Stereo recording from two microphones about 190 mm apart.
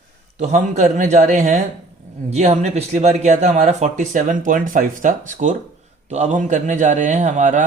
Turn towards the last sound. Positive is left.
turn(degrees=-40)  # may be behind; listen again after turning